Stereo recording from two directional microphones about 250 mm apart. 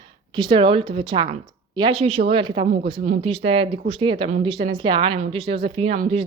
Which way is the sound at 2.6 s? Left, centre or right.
Right.